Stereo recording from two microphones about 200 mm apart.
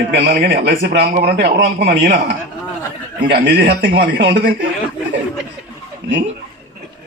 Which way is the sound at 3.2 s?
55° right (ahead or behind).